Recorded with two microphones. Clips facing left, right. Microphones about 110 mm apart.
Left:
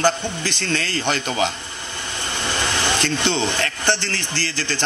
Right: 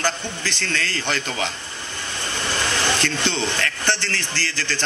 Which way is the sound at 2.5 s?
15° left (ahead or behind).